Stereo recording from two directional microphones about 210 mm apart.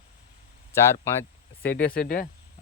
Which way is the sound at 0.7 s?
15° left (ahead or behind).